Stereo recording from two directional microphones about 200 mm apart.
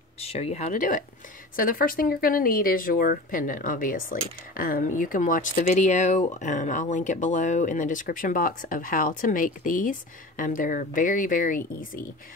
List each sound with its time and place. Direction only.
0.2 s speech: 30° left (ahead or behind)